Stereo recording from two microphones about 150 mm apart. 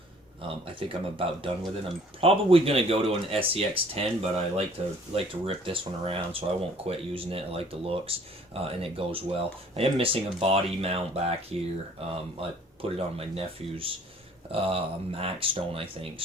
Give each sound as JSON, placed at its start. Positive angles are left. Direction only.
{"t": 0.4, "sound": "speech", "side_deg": -35}